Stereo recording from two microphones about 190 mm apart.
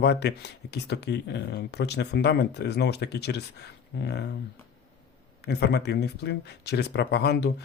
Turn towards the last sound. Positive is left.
turn(degrees=60)  # may be behind; listen again after turning